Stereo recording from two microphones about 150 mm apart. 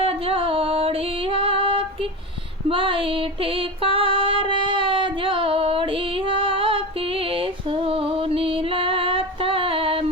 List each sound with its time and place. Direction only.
0.0 s music: 40° right (ahead or behind)
2.6 s female singing: 35° right (ahead or behind)